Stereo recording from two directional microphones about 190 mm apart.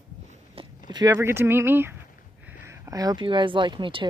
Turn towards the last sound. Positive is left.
turn(degrees=-25)  # may be behind; listen again after turning